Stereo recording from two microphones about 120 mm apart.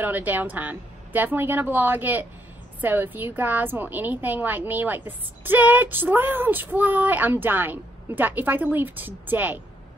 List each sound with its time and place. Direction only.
0.0 s a woman's voice: 15° right (ahead or behind)